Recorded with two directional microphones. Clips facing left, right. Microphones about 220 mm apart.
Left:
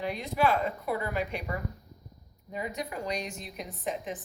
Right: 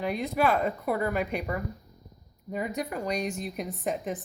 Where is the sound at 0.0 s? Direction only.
50° right (ahead or behind).